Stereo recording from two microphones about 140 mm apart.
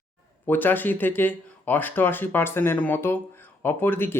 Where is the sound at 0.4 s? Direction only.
15° left (ahead or behind).